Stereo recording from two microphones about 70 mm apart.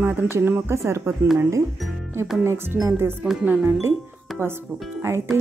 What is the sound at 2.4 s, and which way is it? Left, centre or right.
Speech, right.